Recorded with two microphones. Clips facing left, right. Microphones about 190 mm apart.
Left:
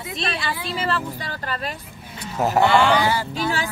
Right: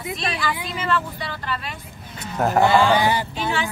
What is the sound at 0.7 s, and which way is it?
Speech, 35° left (ahead or behind).